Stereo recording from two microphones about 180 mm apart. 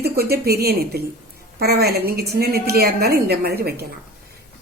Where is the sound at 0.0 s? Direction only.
60° right (ahead or behind).